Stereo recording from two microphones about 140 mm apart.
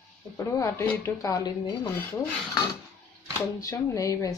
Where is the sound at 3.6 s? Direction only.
25° left (ahead or behind).